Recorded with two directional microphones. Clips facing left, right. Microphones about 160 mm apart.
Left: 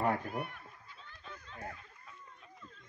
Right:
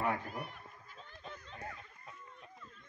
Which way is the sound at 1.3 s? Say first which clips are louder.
Even; 30° right (ahead or behind).